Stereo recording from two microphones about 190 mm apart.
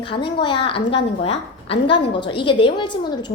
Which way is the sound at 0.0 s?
25° left (ahead or behind).